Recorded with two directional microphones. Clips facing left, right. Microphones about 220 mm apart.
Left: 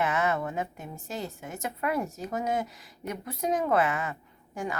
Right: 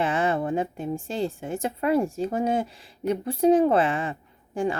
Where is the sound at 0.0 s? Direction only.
30° right (ahead or behind).